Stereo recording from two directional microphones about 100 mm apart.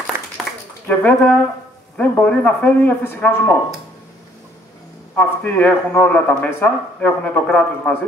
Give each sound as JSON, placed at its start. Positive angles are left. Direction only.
{"t": 0.1, "sound": "a sound", "side_deg": -25}
{"t": 0.8, "sound": "speech", "side_deg": 15}
{"t": 5.1, "sound": "speech", "side_deg": 15}